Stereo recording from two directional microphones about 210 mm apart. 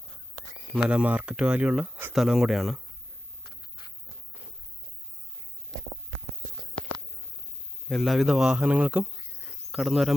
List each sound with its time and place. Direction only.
0.7 s speech: 5° right (ahead or behind)
3.4 s a sound: 45° left (ahead or behind)
7.9 s speech: centre (ahead or behind)